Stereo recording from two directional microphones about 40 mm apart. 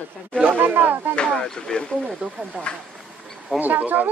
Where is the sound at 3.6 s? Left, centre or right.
Right.